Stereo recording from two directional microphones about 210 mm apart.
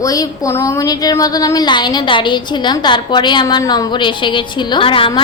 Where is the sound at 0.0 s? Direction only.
15° left (ahead or behind).